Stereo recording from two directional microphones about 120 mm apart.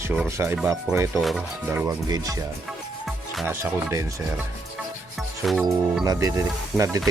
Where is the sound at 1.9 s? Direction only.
35° right (ahead or behind).